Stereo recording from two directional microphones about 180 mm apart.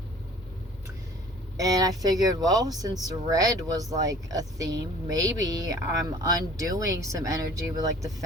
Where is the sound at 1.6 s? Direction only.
20° right (ahead or behind).